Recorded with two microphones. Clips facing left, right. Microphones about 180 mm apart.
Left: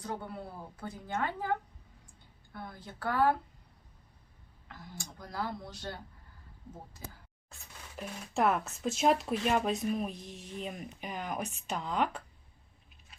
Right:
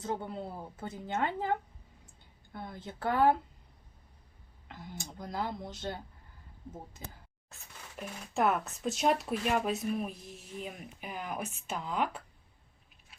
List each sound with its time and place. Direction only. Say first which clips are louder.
0.0 s a woman's voice: right 3 dB; 25° right (ahead or behind)
4.7 s a woman's voice: right 3 dB; 20° right (ahead or behind)
7.9 s speech: even; centre (ahead or behind)